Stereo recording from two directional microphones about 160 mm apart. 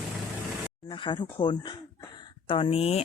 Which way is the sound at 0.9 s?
30° left (ahead or behind).